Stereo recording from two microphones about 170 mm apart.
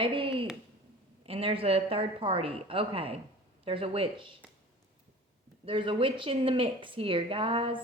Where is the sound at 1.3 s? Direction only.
35° right (ahead or behind).